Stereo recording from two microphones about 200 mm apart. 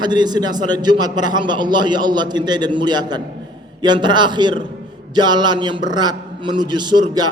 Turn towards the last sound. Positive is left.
turn(degrees=-20)  # may be behind; listen again after turning